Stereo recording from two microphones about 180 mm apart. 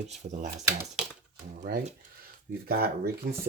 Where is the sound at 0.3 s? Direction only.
45° right (ahead or behind).